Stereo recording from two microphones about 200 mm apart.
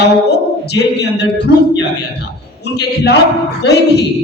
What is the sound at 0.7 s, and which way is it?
Speech, 55° left (ahead or behind).